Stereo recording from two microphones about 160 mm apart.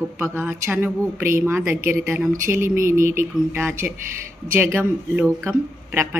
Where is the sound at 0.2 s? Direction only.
15° right (ahead or behind).